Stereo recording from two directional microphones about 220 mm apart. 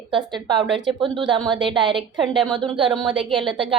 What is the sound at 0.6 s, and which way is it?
Speech, 55° right (ahead or behind).